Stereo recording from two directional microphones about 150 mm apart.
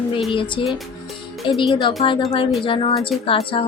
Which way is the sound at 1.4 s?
Centre (ahead or behind).